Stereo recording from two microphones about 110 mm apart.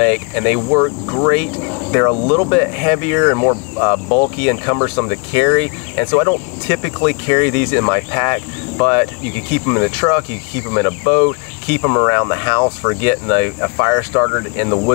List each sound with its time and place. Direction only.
0.0 s speech: 25° left (ahead or behind)
0.6 s speech: 35° left (ahead or behind)
1.7 s cricket: 30° left (ahead or behind)
2.2 s speech: 25° left (ahead or behind)